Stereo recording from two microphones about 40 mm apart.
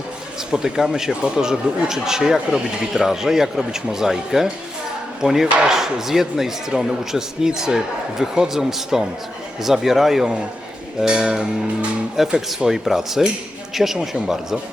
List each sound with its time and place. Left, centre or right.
0.5 s speech: centre
11.0 s music: centre
12.2 s speech: centre